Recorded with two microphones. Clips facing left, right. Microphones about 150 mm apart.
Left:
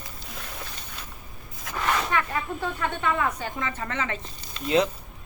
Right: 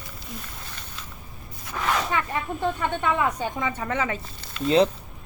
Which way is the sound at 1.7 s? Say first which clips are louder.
Even; 90° left.